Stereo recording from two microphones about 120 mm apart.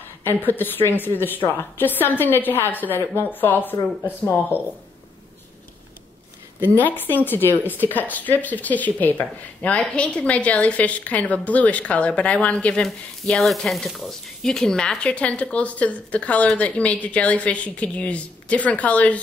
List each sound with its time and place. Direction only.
0.2 s a woman's voice: 15° left (ahead or behind)
6.8 s a woman's voice: 15° left (ahead or behind)